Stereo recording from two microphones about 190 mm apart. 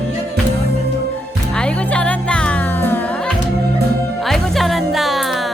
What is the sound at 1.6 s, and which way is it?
Music, 5° left (ahead or behind).